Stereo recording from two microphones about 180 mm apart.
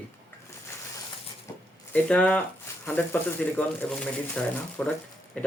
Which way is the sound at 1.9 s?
5° left (ahead or behind).